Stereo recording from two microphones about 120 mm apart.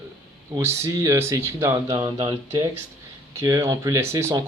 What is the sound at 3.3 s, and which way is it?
Speech, 25° right (ahead or behind).